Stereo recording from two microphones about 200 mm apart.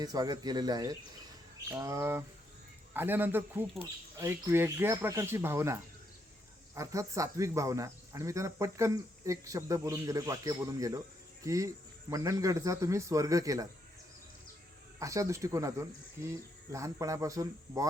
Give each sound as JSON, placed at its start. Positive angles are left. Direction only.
{"t": 0.0, "sound": "speech", "side_deg": -20}
{"t": 14.9, "sound": "speech", "side_deg": -15}
{"t": 16.7, "sound": "speech", "side_deg": -15}